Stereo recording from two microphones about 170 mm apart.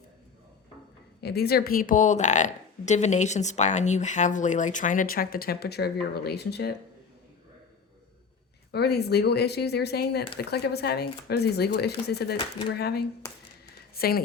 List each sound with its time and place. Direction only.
1.2 s a woman's voice: 70° left (ahead or behind)
8.7 s speech: 75° left (ahead or behind)